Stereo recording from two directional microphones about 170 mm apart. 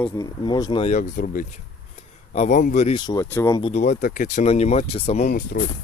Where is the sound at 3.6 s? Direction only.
40° left (ahead or behind).